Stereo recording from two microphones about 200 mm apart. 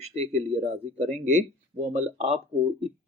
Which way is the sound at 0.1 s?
30° right (ahead or behind).